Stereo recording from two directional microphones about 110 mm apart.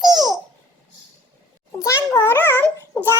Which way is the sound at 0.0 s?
40° right (ahead or behind).